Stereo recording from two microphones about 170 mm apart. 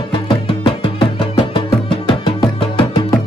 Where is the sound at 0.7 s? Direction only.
30° left (ahead or behind).